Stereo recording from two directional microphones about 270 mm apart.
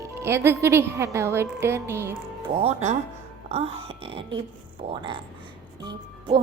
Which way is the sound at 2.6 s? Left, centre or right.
Right.